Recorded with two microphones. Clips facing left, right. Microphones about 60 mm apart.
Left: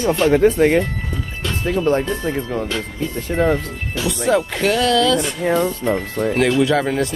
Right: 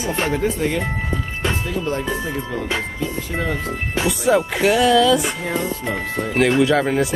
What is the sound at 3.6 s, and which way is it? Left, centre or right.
Speech, right.